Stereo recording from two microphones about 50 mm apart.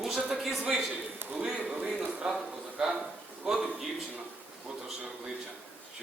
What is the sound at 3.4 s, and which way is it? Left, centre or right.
Speech, centre.